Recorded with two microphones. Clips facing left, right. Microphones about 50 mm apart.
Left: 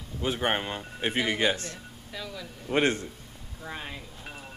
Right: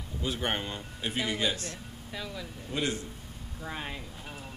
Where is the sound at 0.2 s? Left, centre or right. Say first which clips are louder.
Left 4 dB; left.